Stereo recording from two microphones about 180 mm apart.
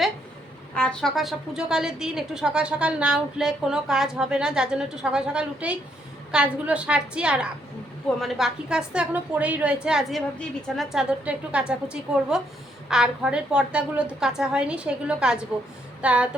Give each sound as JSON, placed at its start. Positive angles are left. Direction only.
{"t": 0.7, "sound": "a woman's voice", "side_deg": 5}